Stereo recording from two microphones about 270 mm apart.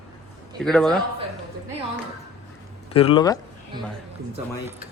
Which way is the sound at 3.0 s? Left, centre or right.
Centre.